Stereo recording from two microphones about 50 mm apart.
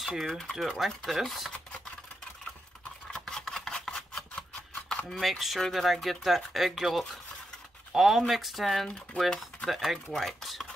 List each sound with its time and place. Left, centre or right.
0.0 s speech: centre
0.3 s speech: centre
0.7 s speech: centre
3.1 s a sound: centre
3.8 s scissors: centre
5.1 s speech: centre